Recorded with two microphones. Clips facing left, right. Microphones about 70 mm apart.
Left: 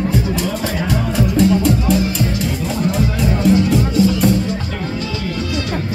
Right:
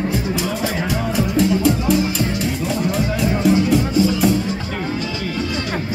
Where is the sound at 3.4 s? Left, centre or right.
Centre.